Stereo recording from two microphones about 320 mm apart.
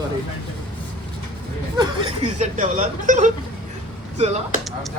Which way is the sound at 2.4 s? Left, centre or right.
Right.